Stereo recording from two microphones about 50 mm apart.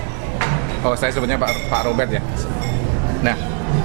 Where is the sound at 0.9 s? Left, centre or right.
Right.